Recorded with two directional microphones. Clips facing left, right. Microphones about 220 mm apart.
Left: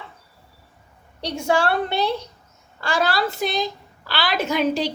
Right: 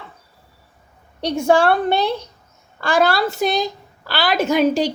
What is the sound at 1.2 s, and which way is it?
A woman's voice, 55° right (ahead or behind).